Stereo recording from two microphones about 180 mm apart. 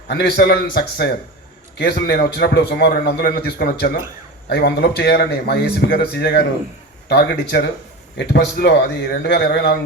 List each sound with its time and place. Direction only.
0.1 s a man's voice: 75° left (ahead or behind)